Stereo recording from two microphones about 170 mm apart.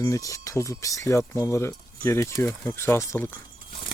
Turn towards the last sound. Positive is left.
turn(degrees=15)  # may be behind; listen again after turning